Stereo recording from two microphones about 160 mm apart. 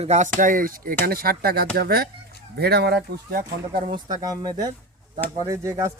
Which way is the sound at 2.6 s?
90° right.